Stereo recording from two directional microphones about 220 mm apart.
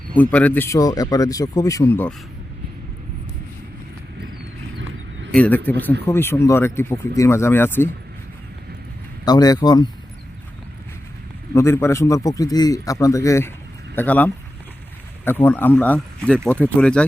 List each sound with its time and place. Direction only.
0.2 s a man's voice: 5° left (ahead or behind)
5.3 s a man's voice: 5° left (ahead or behind)
9.2 s a man's voice: 15° left (ahead or behind)
11.5 s a man's voice: 10° left (ahead or behind)